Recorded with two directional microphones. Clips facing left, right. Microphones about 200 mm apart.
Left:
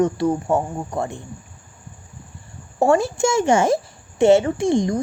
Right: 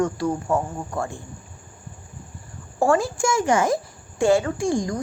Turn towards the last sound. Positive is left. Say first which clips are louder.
# left 4 dB
turn(degrees=25)  # may be behind; listen again after turning